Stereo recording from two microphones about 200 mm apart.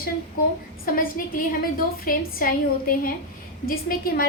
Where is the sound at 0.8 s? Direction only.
45° left (ahead or behind).